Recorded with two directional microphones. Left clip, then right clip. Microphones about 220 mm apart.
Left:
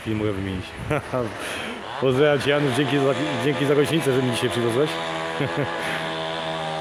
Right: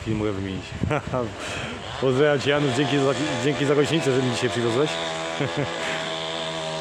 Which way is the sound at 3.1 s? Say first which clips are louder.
Left 1 dB; 40° right (ahead or behind).